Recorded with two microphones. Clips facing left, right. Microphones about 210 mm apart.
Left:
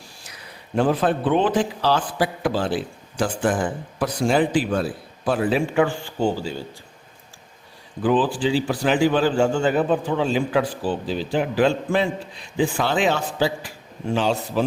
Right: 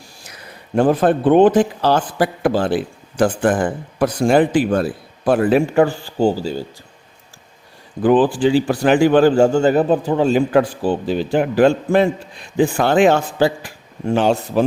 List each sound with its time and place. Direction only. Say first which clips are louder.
0.8 s a man's voice: right 5 dB; 45° right (ahead or behind)
8.0 s a man's voice: right 6 dB; 50° right (ahead or behind)